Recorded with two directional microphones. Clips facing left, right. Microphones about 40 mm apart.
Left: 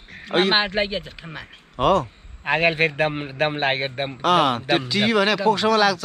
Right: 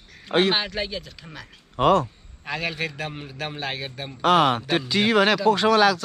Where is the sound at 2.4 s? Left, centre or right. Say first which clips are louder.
Left 9 dB; left.